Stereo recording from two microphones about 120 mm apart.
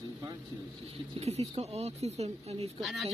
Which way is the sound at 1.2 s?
60° right (ahead or behind).